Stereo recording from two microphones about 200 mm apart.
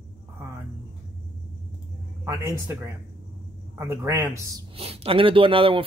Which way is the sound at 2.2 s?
15° right (ahead or behind).